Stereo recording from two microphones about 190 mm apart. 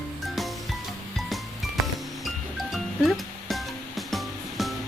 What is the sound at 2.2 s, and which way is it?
Music, centre (ahead or behind).